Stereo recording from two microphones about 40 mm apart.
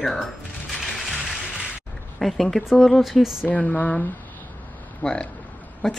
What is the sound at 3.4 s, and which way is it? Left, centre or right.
Speech, left.